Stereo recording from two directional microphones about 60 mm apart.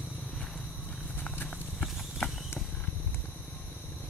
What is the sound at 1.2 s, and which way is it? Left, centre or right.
Clip-clop, left.